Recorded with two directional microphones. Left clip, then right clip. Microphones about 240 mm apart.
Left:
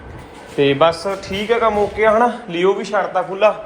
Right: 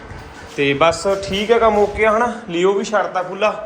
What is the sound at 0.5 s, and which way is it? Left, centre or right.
Speech, centre.